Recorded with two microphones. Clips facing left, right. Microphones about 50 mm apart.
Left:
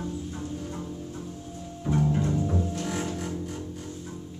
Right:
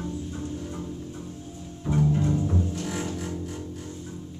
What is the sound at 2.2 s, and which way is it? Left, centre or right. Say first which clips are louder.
Music: right 1 dB; centre.